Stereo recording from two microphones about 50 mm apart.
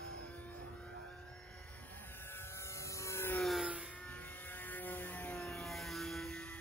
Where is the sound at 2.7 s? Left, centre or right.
Left.